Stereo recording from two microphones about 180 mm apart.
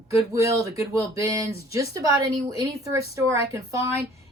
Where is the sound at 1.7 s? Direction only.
20° right (ahead or behind).